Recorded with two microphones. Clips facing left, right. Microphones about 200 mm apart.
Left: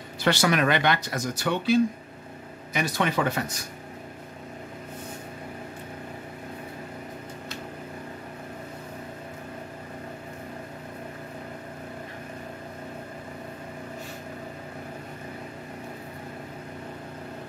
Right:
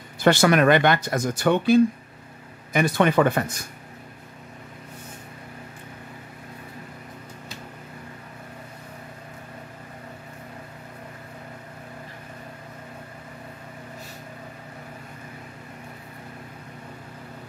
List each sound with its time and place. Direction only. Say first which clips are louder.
0.2 s speech: right 5 dB; 50° right (ahead or behind)